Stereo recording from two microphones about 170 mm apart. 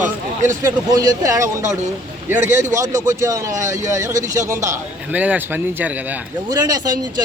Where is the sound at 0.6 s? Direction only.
20° right (ahead or behind).